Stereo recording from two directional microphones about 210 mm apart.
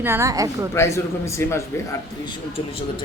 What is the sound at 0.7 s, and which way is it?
A man's voice, 15° left (ahead or behind).